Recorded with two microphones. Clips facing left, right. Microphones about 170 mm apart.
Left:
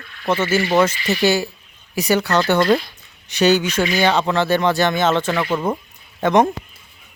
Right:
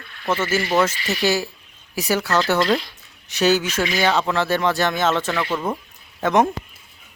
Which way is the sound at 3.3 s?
Centre (ahead or behind).